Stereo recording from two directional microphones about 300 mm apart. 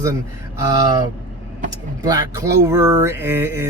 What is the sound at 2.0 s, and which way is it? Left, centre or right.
Speech, centre.